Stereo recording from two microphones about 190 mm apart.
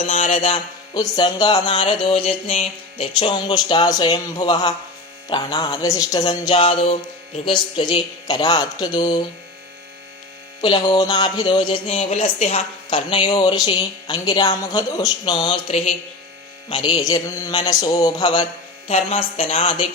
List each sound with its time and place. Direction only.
0.0 s speech: 30° left (ahead or behind)
10.6 s a woman's voice: 20° left (ahead or behind)